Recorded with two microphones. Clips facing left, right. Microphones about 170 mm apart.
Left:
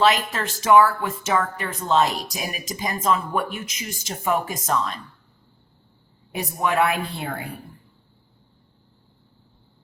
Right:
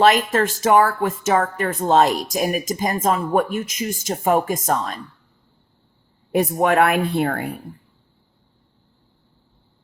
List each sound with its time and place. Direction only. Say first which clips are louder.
0.0 s speech: right 5 dB; 50° right (ahead or behind)
6.3 s a woman's voice: right 6 dB; 50° right (ahead or behind)